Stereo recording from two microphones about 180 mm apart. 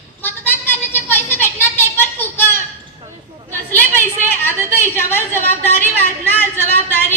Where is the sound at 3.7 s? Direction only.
10° left (ahead or behind).